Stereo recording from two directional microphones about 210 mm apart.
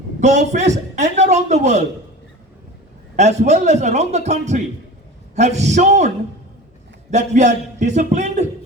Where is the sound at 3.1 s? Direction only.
35° right (ahead or behind).